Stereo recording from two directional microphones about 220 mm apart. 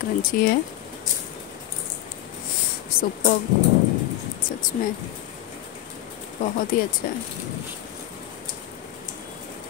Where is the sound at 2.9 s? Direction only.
40° left (ahead or behind).